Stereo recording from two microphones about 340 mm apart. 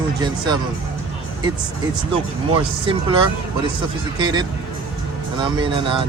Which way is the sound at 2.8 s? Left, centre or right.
Centre.